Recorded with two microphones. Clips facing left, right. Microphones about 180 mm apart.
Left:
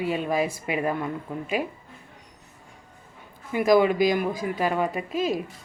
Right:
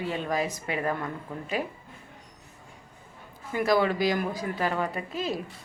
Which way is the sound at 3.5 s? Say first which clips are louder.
Left 5 dB; 15° left (ahead or behind).